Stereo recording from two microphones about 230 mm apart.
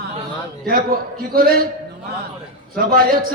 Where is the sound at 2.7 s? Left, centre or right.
Right.